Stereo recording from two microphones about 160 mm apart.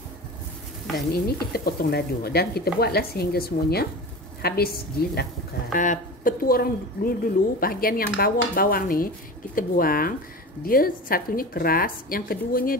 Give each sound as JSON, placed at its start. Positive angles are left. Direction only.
{"t": 1.1, "sound": "speech", "side_deg": 70}
{"t": 5.8, "sound": "a woman's voice", "side_deg": 55}